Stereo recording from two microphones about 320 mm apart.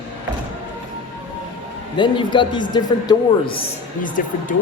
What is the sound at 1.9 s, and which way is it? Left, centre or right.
A man's voice, centre.